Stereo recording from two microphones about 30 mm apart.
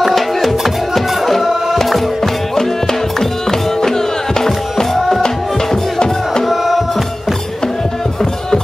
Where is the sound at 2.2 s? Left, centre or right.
Centre.